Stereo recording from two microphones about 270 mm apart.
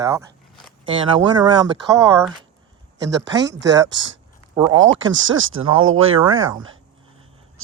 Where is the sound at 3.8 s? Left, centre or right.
Right.